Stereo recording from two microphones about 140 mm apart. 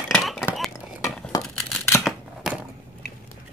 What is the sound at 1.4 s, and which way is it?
Scissors, 5° left (ahead or behind).